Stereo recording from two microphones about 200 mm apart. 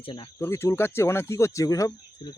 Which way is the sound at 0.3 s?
15° left (ahead or behind).